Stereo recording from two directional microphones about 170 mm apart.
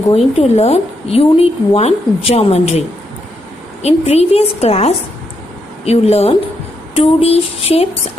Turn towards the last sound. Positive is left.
turn(degrees=35)  # may be behind; listen again after turning